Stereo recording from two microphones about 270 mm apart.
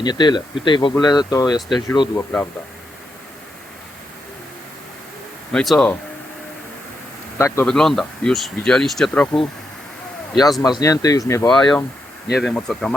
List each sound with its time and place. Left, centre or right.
0.0 s speech: centre
5.5 s speech: centre
7.3 s speech: centre
10.6 s speech: centre
12.3 s speech: centre